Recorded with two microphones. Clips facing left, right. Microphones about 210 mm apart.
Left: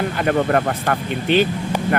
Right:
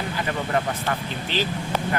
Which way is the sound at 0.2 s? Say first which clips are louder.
Left 8 dB; 60° left (ahead or behind).